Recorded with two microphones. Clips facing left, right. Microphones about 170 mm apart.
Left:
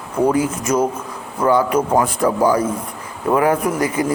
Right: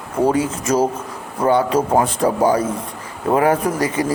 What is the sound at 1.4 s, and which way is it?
A man's voice, 25° right (ahead or behind).